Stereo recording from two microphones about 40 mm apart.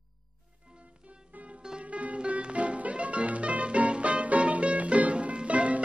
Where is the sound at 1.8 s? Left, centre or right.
Right.